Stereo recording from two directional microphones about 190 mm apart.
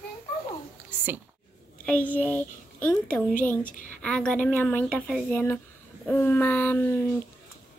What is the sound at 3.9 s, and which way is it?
A woman's voice, 5° left (ahead or behind).